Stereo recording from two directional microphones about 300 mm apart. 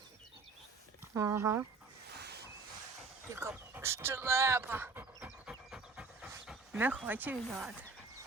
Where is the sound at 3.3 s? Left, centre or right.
Centre.